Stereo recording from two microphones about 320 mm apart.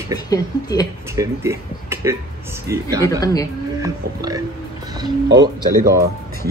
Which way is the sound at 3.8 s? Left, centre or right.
Centre.